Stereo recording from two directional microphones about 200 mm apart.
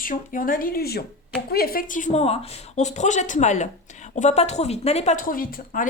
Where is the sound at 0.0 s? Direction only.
45° left (ahead or behind).